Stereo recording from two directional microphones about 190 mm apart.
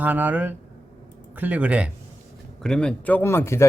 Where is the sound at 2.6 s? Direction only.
5° left (ahead or behind).